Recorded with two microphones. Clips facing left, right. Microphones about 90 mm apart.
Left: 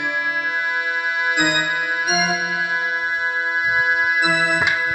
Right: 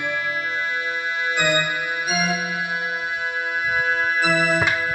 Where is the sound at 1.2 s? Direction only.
20° left (ahead or behind).